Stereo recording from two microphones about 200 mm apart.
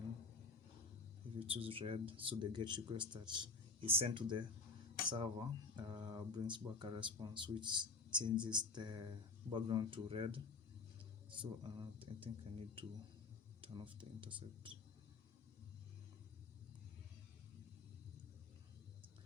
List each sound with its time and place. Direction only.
1.4 s speech: 25° right (ahead or behind)